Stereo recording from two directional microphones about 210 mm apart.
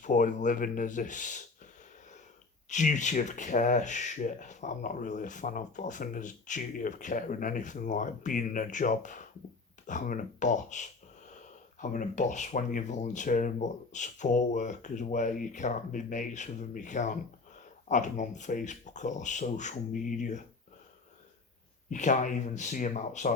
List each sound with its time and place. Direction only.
0.0 s speech: 35° left (ahead or behind)
2.6 s speech: 35° left (ahead or behind)
21.8 s speech: 35° left (ahead or behind)